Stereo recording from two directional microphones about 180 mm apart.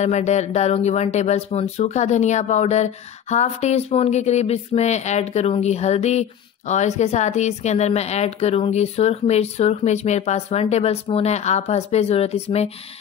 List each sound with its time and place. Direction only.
0.0 s speech: 40° left (ahead or behind)